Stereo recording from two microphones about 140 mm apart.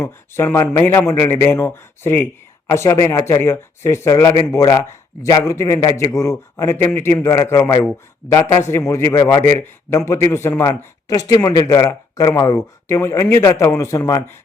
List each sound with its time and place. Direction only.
0.0 s speech: 20° left (ahead or behind)